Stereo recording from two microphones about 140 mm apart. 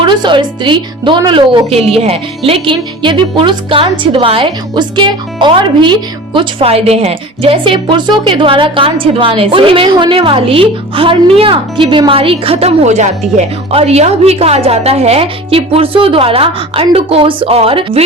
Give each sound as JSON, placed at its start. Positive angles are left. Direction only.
{"t": 0.0, "sound": "a woman's voice", "side_deg": -35}